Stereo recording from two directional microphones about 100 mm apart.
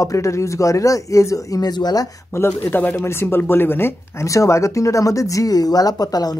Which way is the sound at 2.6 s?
20° left (ahead or behind).